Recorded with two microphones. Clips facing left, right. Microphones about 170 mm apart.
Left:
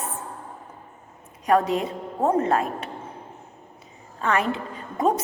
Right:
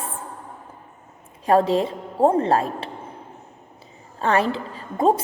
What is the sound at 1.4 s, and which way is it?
A woman's voice, 30° right (ahead or behind).